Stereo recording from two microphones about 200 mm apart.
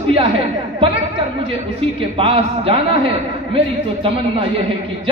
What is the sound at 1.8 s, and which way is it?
A woman's voice, 30° right (ahead or behind).